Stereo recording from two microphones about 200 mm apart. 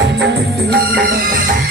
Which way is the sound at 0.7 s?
50° right (ahead or behind).